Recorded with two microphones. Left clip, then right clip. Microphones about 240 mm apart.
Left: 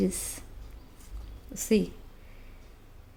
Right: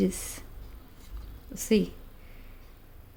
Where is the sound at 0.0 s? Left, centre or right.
Centre.